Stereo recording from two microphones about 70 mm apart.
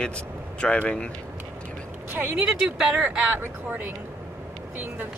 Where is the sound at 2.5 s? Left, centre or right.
Centre.